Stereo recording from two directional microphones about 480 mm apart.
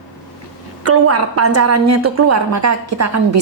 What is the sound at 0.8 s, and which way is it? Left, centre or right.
A woman's voice, right.